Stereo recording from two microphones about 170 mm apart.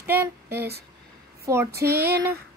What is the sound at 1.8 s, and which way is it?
Speech, 65° right (ahead or behind).